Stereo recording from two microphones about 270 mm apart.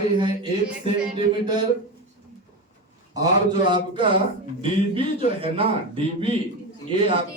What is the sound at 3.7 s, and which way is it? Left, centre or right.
A man's voice, centre.